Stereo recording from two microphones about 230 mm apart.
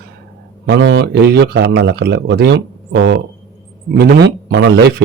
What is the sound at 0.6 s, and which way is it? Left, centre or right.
A man's voice, right.